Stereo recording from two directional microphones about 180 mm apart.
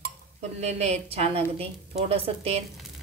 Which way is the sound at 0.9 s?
35° right (ahead or behind).